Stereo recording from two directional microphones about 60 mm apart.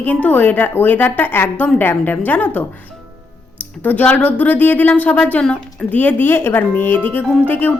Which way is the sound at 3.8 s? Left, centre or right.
Left.